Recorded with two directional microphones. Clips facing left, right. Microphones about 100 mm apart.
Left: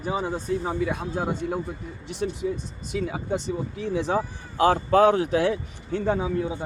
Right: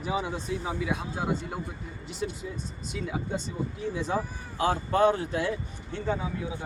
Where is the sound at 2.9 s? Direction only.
60° left (ahead or behind).